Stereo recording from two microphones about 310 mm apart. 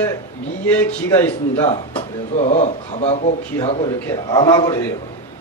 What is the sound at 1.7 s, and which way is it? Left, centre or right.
A man's voice, centre.